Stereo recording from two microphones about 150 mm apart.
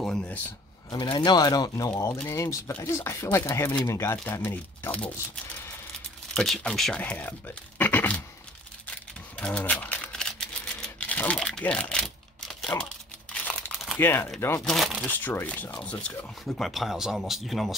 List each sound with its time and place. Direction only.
0.0 s a sound: 5° left (ahead or behind)
0.8 s speech: 30° left (ahead or behind); by 8.2 s 10° left (ahead or behind)
8.9 s typewriter: 10° left (ahead or behind)
13.3 s crumpling: 5° left (ahead or behind)
13.9 s speech: 15° left (ahead or behind)
14.7 s speech: centre (ahead or behind)
15.0 s speech: 10° left (ahead or behind)
16.5 s speech: centre (ahead or behind)